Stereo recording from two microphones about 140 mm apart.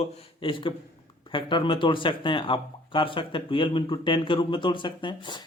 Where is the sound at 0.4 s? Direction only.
35° left (ahead or behind).